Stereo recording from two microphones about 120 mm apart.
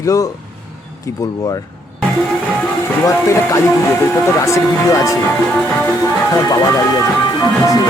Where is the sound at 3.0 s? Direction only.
25° left (ahead or behind).